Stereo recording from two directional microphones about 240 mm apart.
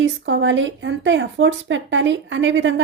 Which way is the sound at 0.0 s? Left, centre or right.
Right.